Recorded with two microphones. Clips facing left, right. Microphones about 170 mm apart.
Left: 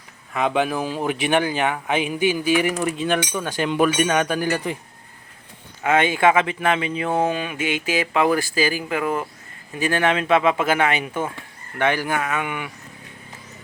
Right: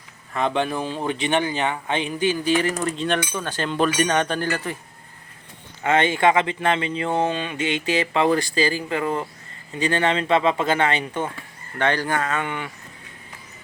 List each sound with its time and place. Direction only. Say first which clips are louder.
0.3 s speech: left 2 dB; 5° left (ahead or behind)
5.8 s speech: left 1 dB; 10° left (ahead or behind)